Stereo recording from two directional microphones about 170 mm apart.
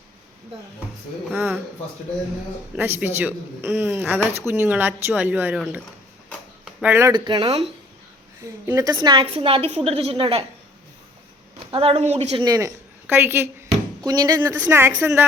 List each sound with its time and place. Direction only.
1.3 s a man's voice: 10° right (ahead or behind)
2.7 s a man's voice: 10° right (ahead or behind)
6.7 s speech: 10° right (ahead or behind)
7.1 s a woman's voice: 25° right (ahead or behind)
11.7 s a woman's voice: 35° right (ahead or behind)
12.4 s a woman's voice: 20° right (ahead or behind)
14.0 s speech: 25° right (ahead or behind)